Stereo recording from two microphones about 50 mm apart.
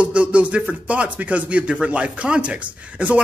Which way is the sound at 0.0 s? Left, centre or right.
Right.